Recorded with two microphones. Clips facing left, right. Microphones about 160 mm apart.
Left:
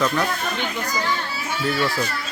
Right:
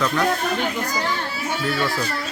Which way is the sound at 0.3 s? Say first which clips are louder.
Right 4 dB; 40° right (ahead or behind).